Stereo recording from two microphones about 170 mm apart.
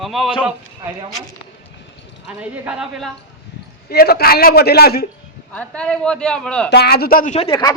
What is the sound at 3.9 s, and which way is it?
A man's voice, 65° left (ahead or behind).